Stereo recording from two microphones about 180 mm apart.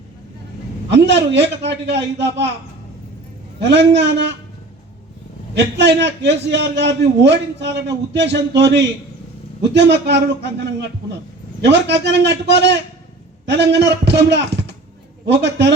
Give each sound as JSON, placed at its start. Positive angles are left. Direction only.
{"t": 0.9, "sound": "a man's voice", "side_deg": -75}
{"t": 3.7, "sound": "a man's voice", "side_deg": -75}
{"t": 5.5, "sound": "a man's voice", "side_deg": -70}
{"t": 11.6, "sound": "a man's voice", "side_deg": -75}